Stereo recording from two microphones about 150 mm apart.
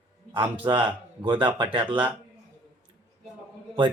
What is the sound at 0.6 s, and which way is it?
Speech, 30° right (ahead or behind).